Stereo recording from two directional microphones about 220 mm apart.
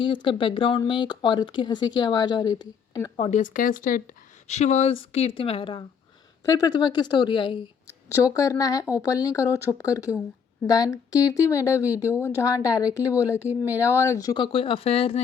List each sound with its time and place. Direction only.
0.0 s speech: 20° left (ahead or behind)
3.2 s a woman's voice: 35° left (ahead or behind)